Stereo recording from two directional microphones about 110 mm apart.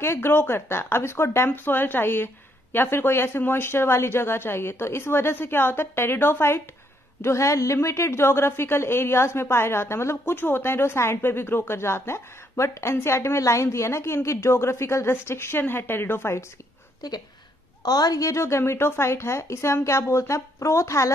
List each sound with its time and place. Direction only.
0.0 s a woman's voice: 20° left (ahead or behind)
17.0 s a woman's voice: 35° left (ahead or behind)